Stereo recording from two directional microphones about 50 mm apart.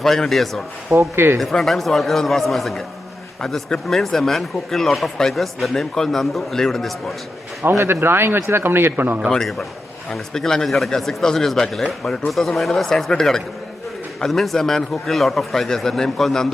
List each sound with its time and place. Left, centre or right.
0.0 s speech: centre
0.9 s speech: right
1.6 s speech: centre
5.7 s speech: centre
7.7 s speech: right
9.3 s a man's voice: centre